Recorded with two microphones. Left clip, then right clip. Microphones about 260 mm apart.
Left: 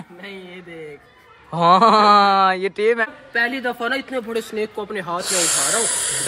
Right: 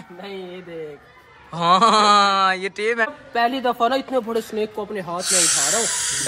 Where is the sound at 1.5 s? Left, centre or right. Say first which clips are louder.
Left 2 dB; centre.